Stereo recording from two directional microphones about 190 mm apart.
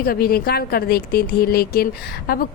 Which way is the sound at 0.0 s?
50° left (ahead or behind).